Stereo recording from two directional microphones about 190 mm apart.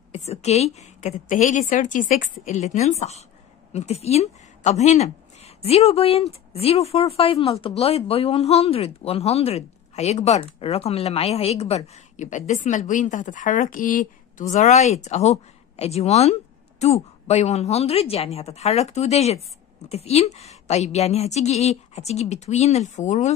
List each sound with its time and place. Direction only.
0.1 s a woman's voice: 35° left (ahead or behind)